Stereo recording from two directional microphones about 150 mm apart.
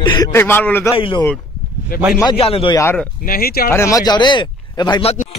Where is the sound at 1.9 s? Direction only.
75° left (ahead or behind).